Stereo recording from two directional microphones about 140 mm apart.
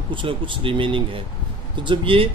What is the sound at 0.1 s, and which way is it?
A man's voice, 35° right (ahead or behind).